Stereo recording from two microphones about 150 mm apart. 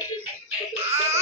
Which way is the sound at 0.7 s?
45° right (ahead or behind).